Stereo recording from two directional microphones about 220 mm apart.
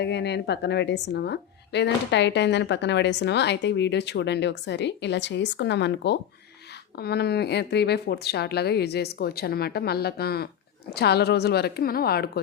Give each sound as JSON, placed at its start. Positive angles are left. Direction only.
{"t": 0.0, "sound": "speech", "side_deg": 50}